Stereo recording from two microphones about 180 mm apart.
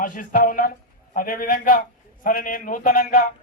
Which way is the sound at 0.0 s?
50° left (ahead or behind).